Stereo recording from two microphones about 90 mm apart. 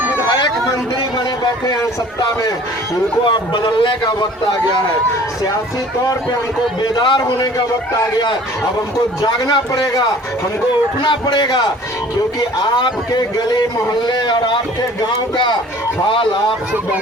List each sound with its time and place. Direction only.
1.6 s a man's voice: 45° left (ahead or behind)
3.2 s a man's voice: 60° left (ahead or behind)
6.9 s a man's voice: 60° left (ahead or behind)
9.2 s a man's voice: 50° left (ahead or behind)
11.0 s a man's voice: 55° left (ahead or behind)
13.1 s a man's voice: 45° left (ahead or behind)